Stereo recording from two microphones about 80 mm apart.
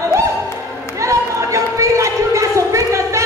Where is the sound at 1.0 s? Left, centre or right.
Right.